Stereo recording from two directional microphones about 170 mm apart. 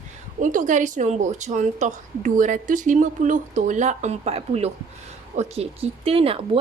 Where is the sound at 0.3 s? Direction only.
45° right (ahead or behind).